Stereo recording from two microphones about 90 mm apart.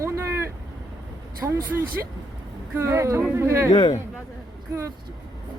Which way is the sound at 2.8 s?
30° right (ahead or behind).